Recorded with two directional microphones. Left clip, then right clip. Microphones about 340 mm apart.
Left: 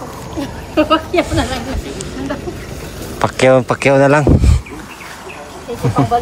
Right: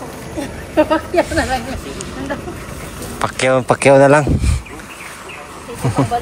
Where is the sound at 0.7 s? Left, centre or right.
Centre.